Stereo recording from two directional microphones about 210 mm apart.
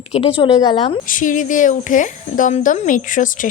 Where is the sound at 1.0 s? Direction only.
40° left (ahead or behind).